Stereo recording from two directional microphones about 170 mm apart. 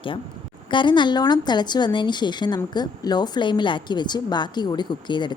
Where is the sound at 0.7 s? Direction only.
25° left (ahead or behind).